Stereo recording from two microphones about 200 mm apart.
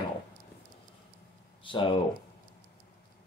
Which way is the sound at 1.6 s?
25° left (ahead or behind).